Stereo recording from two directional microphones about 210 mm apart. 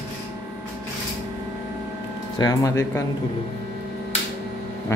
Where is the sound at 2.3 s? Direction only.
15° left (ahead or behind).